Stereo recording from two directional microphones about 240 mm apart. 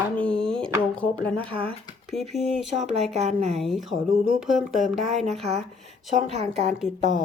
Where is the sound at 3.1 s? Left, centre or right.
Right.